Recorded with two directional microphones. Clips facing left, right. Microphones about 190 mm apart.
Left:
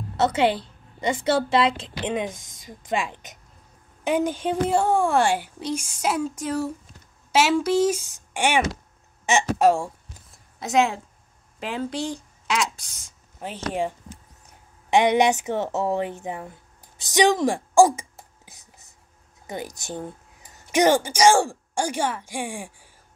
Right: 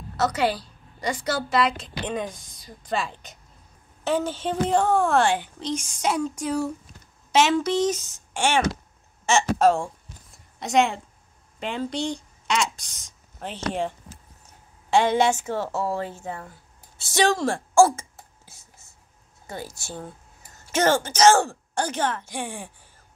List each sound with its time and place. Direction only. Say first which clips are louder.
0.2 s a woman's voice: left 3 dB; 25° left (ahead or behind)
10.3 s a sound: even; centre (ahead or behind)
11.6 s a woman's voice: even; 5° left (ahead or behind)
17.0 s whispering: left 3 dB; 15° left (ahead or behind)
19.4 s speech: left 3 dB; 15° left (ahead or behind)